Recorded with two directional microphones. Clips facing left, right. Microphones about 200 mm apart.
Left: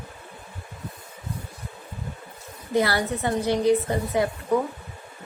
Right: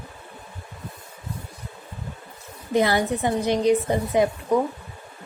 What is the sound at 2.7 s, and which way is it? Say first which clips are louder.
A woman's voice: right 2 dB; 20° right (ahead or behind).